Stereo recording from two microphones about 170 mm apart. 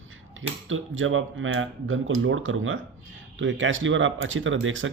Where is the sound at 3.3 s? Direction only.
90° right.